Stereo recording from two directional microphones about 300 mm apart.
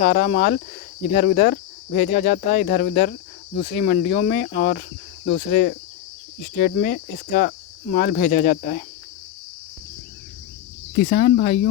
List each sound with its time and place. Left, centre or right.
0.0 s speech: left
10.9 s speech: left